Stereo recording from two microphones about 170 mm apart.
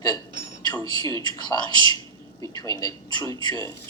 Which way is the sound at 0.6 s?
25° left (ahead or behind).